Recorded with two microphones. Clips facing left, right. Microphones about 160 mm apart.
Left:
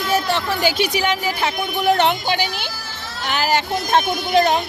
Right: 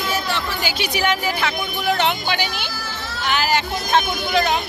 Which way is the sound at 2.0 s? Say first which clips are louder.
Left 3 dB; 50° left (ahead or behind).